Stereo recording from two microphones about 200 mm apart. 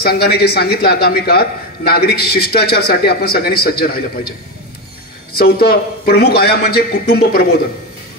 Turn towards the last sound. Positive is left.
turn(degrees=50)  # may be behind; listen again after turning